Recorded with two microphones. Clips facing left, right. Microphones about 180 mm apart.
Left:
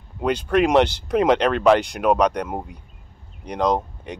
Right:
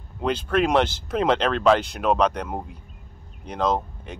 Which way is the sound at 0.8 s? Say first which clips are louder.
Left 2 dB; 65° left (ahead or behind).